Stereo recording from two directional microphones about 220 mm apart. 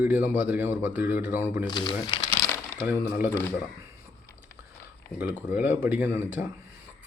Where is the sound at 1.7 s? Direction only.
20° left (ahead or behind).